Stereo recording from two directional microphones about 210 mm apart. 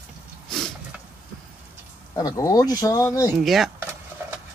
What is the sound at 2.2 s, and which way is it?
Speech, 15° left (ahead or behind).